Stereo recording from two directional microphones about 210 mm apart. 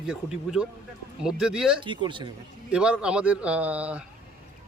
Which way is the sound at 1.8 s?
20° right (ahead or behind).